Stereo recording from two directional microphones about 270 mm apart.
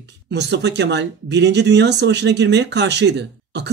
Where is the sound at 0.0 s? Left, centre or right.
Right.